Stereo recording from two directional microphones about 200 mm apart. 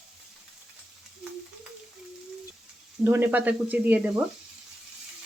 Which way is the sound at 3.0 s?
10° right (ahead or behind).